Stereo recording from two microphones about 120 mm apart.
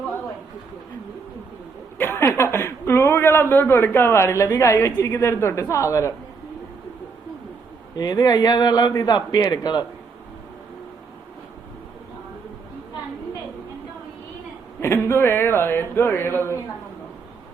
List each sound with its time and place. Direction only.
2.0 s a sound: 20° left (ahead or behind)
3.5 s a man's voice: 20° left (ahead or behind)
7.9 s a man's voice: 30° left (ahead or behind)
14.8 s a man's voice: 20° left (ahead or behind)